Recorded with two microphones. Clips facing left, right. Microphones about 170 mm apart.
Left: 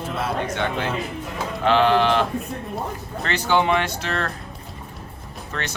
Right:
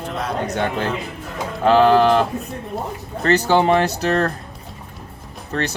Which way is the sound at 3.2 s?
35° right (ahead or behind).